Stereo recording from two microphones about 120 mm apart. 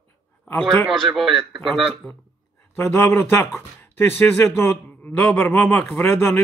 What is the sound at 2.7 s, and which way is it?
A man's voice, 25° left (ahead or behind).